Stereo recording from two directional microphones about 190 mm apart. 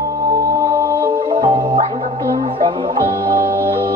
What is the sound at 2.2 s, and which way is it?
Music, 30° right (ahead or behind).